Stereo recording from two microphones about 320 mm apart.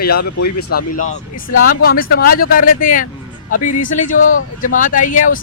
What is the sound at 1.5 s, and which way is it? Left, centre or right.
Speech, left.